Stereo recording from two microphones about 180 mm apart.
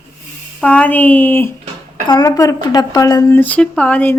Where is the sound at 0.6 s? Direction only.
5° left (ahead or behind).